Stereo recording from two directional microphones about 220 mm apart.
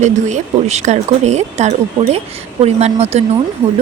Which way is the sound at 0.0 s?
30° right (ahead or behind).